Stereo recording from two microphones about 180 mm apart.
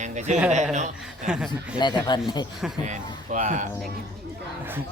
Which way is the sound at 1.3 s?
5° right (ahead or behind).